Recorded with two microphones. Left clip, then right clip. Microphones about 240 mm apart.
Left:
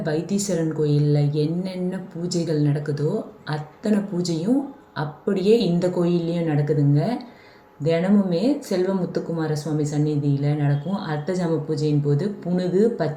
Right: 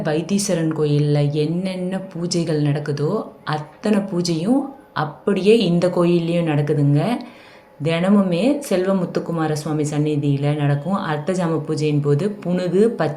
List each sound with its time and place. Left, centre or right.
0.0 s a woman's voice: centre